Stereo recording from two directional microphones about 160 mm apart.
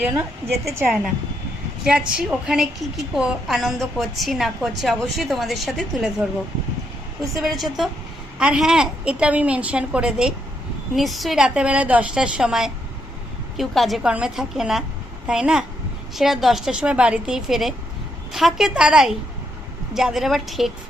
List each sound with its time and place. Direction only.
0.0 s a woman's voice: 15° right (ahead or behind)
1.8 s a woman's voice: 5° right (ahead or behind)
7.3 s a woman's voice: centre (ahead or behind)